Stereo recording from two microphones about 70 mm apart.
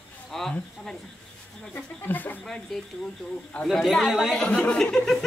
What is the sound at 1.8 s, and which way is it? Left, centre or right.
Speech, left.